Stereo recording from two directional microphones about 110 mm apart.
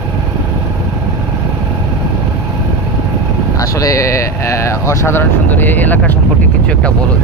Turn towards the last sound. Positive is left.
turn(degrees=15)  # may be behind; listen again after turning